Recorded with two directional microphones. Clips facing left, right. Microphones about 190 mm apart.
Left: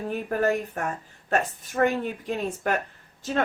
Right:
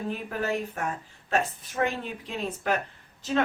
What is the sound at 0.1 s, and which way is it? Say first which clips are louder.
Speech: left 7 dB; 45° left (ahead or behind).